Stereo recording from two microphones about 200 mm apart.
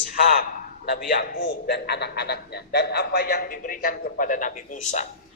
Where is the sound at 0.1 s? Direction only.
40° left (ahead or behind).